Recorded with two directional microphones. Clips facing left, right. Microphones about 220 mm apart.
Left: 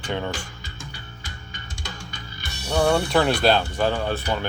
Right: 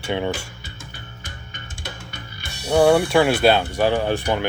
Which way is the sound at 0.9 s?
55° right (ahead or behind).